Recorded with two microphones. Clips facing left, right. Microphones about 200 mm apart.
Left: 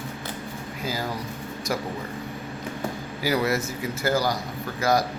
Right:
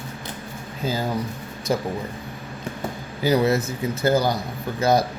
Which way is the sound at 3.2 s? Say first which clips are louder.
Right 5 dB; 20° right (ahead or behind).